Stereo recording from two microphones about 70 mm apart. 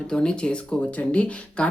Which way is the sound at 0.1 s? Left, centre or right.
Centre.